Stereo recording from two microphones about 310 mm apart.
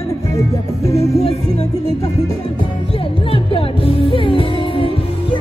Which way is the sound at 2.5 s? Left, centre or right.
Centre.